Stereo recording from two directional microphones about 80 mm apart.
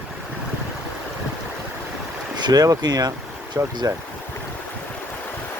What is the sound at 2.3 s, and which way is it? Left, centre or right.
Speech, right.